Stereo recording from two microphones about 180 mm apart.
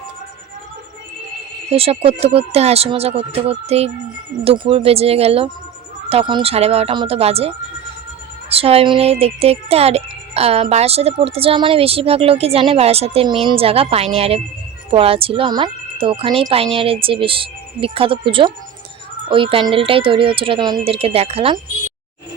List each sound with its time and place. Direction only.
1.7 s speech: 35° right (ahead or behind)